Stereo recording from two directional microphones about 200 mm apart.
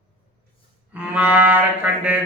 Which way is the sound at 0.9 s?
5° right (ahead or behind).